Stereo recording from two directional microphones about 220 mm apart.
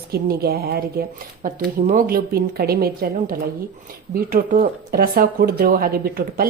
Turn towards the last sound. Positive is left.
turn(degrees=-40)  # may be behind; listen again after turning